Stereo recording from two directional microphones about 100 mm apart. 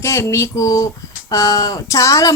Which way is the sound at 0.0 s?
30° left (ahead or behind).